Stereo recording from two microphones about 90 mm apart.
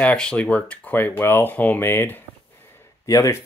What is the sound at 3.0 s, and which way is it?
Speech, 40° left (ahead or behind).